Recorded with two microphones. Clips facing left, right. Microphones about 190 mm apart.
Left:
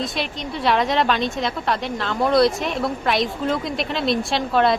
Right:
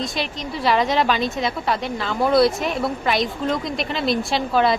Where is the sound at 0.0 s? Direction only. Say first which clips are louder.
Even; centre (ahead or behind).